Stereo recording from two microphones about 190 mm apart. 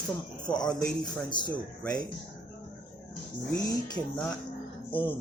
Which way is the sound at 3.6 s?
20° left (ahead or behind).